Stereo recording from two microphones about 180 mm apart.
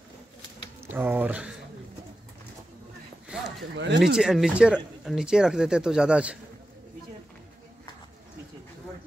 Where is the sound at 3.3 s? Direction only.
5° right (ahead or behind).